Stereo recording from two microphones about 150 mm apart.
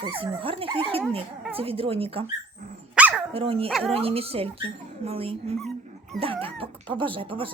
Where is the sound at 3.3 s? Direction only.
40° right (ahead or behind).